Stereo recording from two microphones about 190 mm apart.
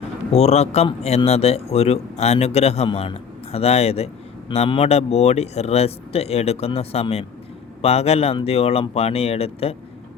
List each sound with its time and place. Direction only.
0.3 s speech: 35° left (ahead or behind)